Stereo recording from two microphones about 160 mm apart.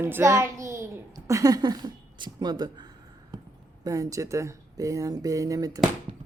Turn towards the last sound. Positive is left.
turn(degrees=-20)  # may be behind; listen again after turning